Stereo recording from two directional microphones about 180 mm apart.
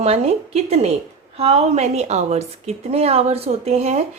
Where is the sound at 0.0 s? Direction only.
35° right (ahead or behind).